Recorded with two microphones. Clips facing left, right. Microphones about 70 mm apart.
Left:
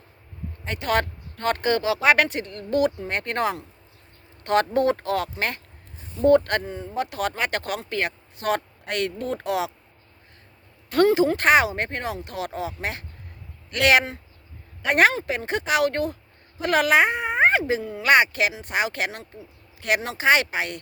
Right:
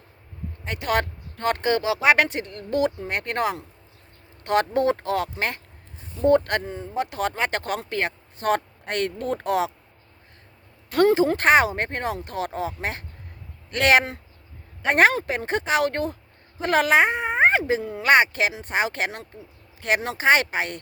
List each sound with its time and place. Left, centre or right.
0.6 s speech: centre
3.1 s speech: centre; by 9.7 s right
11.0 s speech: right
16.6 s a sound: right
18.0 s speech: right